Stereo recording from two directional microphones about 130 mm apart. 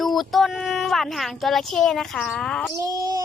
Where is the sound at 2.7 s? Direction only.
30° right (ahead or behind).